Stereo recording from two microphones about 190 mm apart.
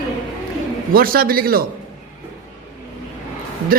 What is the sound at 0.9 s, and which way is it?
Speech, 50° right (ahead or behind).